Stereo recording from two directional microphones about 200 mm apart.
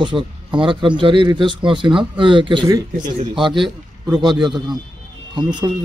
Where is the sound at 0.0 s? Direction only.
25° right (ahead or behind).